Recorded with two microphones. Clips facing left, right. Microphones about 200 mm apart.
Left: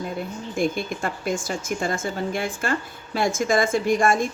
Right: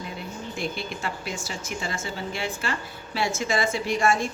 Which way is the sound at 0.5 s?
50° left (ahead or behind).